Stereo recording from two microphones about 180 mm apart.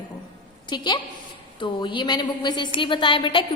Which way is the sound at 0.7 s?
25° left (ahead or behind).